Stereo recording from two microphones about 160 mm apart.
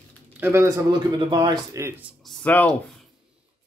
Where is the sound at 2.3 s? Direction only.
10° left (ahead or behind).